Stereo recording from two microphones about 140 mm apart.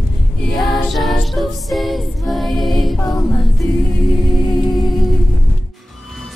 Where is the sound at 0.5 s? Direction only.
Centre (ahead or behind).